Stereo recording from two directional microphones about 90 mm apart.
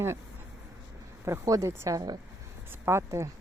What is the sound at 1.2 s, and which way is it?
Speech, 35° right (ahead or behind).